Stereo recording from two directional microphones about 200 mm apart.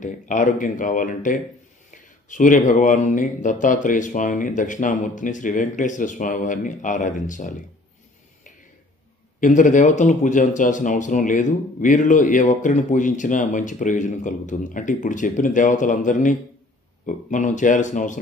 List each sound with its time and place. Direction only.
0.0 s speech: 40° left (ahead or behind)
9.4 s speech: 40° left (ahead or behind)